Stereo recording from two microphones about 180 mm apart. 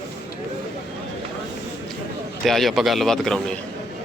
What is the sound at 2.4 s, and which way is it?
A man's voice, centre (ahead or behind).